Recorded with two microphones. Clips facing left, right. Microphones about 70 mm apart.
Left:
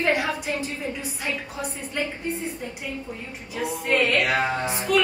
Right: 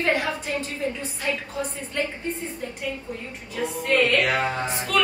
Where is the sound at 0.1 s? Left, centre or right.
Centre.